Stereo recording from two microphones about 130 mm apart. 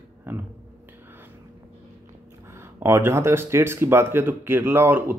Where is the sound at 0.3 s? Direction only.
15° right (ahead or behind).